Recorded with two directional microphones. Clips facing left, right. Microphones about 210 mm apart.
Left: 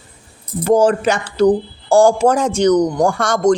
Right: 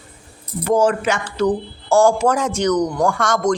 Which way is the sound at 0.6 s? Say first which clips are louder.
Left 4 dB; 30° left (ahead or behind).